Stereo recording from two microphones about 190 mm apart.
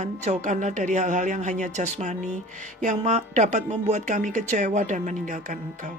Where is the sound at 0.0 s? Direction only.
40° right (ahead or behind).